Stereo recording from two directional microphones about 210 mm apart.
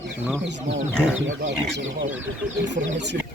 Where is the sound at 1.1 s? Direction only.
65° right (ahead or behind).